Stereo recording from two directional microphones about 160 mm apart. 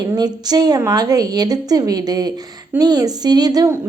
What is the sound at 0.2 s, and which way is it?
A woman's voice, 25° right (ahead or behind).